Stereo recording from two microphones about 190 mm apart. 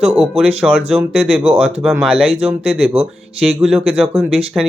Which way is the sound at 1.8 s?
5° right (ahead or behind).